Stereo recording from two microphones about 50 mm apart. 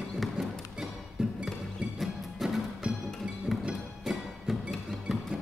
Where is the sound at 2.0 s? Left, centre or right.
Centre.